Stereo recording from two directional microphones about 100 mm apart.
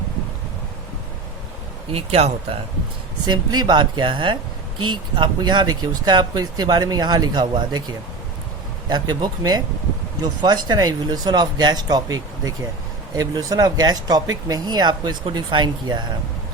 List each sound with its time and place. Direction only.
1.9 s speech: 85° right
3.2 s speech: 45° right (ahead or behind)